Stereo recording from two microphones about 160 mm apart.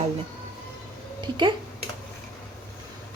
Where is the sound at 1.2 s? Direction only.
30° right (ahead or behind).